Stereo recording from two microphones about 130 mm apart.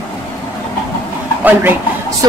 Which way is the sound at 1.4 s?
15° right (ahead or behind).